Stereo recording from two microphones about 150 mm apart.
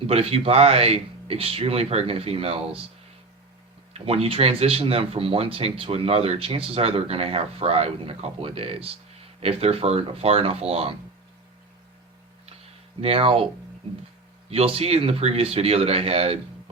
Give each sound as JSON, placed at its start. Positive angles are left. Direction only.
{"t": 0.1, "sound": "speech", "side_deg": -40}
{"t": 3.9, "sound": "speech", "side_deg": -40}
{"t": 13.0, "sound": "speech", "side_deg": -40}
{"t": 14.5, "sound": "speech", "side_deg": -40}